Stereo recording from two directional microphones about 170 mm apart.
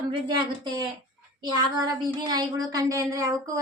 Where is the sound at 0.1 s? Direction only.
25° right (ahead or behind).